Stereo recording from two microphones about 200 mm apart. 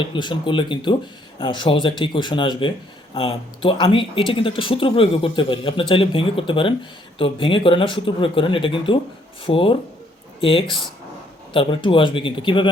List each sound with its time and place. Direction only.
0.0 s speech: 25° left (ahead or behind)
11.5 s speech: 25° left (ahead or behind)